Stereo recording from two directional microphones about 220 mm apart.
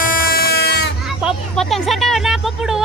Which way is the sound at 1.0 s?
Centre (ahead or behind).